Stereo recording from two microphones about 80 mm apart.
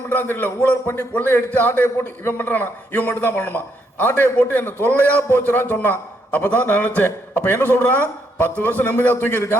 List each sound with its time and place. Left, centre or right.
0.1 s a man's voice: left